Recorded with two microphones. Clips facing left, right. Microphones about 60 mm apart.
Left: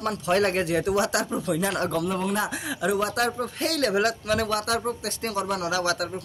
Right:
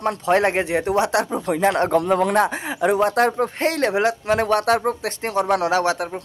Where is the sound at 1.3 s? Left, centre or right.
Right.